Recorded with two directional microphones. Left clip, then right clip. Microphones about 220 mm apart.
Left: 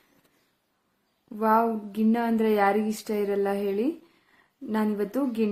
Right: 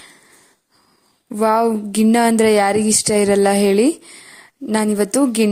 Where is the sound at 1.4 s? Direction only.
40° right (ahead or behind).